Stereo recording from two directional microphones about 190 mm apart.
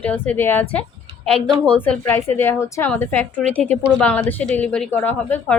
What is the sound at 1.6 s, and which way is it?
A woman's voice, 5° left (ahead or behind).